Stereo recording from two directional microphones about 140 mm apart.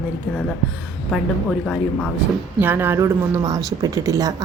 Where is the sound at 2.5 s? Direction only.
15° right (ahead or behind).